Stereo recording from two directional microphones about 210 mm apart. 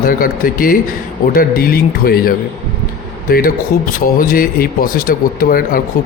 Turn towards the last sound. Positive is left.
turn(degrees=40)  # may be behind; listen again after turning